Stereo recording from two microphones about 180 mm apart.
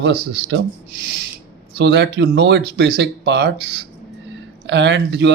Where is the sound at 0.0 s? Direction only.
70° right (ahead or behind).